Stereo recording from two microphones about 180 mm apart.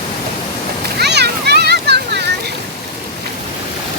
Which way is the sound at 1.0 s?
65° right (ahead or behind).